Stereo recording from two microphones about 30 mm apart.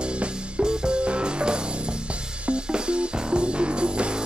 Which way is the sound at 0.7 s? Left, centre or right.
Right.